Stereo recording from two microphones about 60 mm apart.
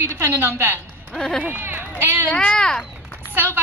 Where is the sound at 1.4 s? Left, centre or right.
Right.